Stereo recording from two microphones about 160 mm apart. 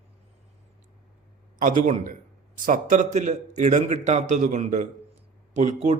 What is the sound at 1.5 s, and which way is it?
Speech, 55° right (ahead or behind).